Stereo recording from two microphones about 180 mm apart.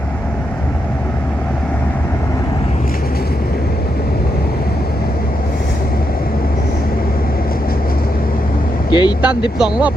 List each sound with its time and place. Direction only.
8.9 s speech: 25° left (ahead or behind)
9.2 s speech: 5° right (ahead or behind)